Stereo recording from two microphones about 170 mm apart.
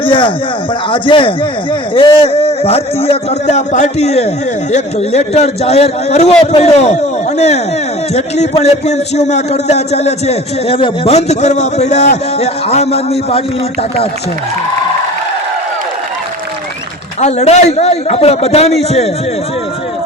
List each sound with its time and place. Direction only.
0.0 s a man's voice: 30° left (ahead or behind)
17.2 s a man's voice: 40° left (ahead or behind)